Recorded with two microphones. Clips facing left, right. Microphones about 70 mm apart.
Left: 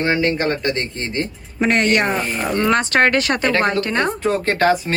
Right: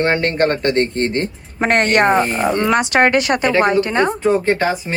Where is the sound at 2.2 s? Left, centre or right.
Centre.